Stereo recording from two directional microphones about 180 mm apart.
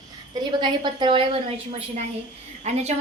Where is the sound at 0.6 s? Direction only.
25° right (ahead or behind).